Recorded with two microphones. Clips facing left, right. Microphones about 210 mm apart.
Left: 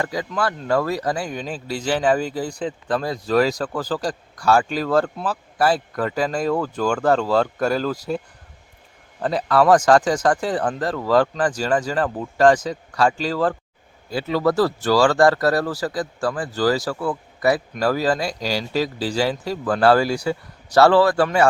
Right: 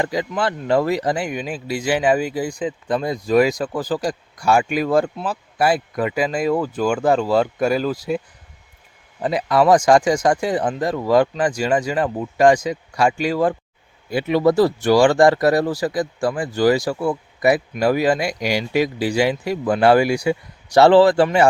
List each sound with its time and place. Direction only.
0.0 s speech: 15° right (ahead or behind)
9.2 s speech: 10° right (ahead or behind)